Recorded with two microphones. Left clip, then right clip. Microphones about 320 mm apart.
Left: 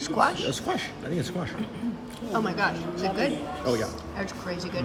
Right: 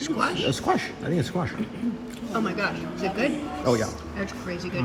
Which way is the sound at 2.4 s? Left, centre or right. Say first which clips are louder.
Left 1 dB; centre.